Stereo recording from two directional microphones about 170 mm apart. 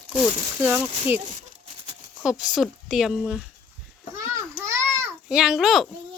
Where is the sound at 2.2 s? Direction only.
5° right (ahead or behind).